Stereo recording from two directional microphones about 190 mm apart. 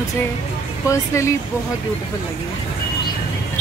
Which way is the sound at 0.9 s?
15° left (ahead or behind).